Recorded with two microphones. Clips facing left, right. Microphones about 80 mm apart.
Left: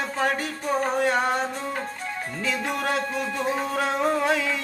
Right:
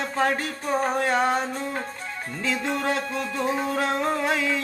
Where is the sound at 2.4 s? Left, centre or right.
Centre.